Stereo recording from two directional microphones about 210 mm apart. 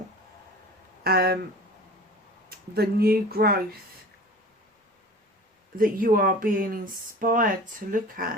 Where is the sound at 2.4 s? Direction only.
45° right (ahead or behind).